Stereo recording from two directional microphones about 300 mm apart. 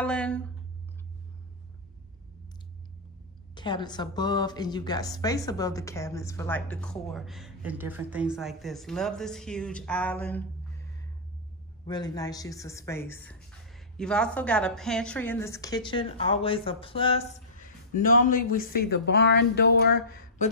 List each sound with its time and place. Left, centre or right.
0.0 s speech: centre
3.5 s speech: centre; by 20.4 s left